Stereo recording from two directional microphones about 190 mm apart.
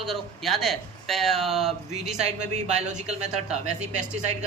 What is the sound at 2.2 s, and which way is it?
Speech, 35° right (ahead or behind).